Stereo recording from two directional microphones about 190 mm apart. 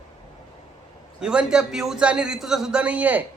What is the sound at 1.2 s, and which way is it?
A man's voice, 5° right (ahead or behind).